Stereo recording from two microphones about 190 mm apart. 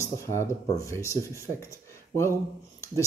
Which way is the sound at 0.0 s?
15° left (ahead or behind).